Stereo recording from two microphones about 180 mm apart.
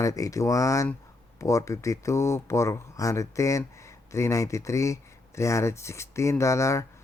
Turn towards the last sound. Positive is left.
turn(degrees=15)  # may be behind; listen again after turning